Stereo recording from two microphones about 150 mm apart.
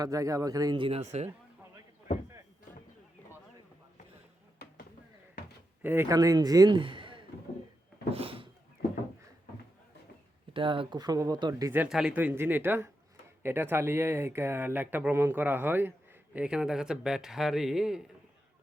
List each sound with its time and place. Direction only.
0.0 s speech: 20° right (ahead or behind); by 1.3 s 45° right (ahead or behind)
5.8 s a man's voice: 15° right (ahead or behind); by 8.4 s 40° right (ahead or behind)
10.5 s speech: 35° right (ahead or behind)
11.7 s speech: 5° right (ahead or behind)